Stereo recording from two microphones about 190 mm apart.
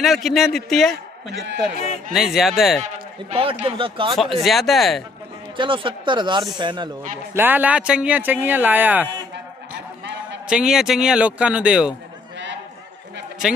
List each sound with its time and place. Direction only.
0.0 s speech: centre (ahead or behind)
2.1 s speech: centre (ahead or behind)
2.8 s speech: 35° right (ahead or behind)
4.1 s speech: centre (ahead or behind)
5.6 s speech: 25° right (ahead or behind)
7.3 s speech: 10° right (ahead or behind)
10.5 s speech: 5° right (ahead or behind)